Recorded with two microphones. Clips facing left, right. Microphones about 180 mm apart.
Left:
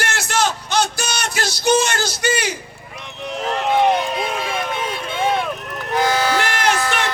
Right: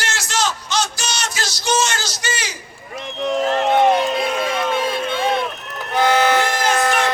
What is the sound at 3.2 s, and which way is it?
Speech, 45° right (ahead or behind).